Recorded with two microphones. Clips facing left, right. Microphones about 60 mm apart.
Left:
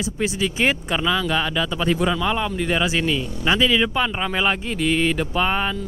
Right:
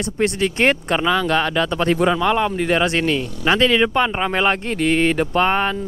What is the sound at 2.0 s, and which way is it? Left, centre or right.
Speech, right.